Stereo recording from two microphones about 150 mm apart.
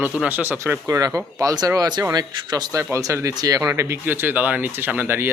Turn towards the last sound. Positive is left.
turn(degrees=-15)  # may be behind; listen again after turning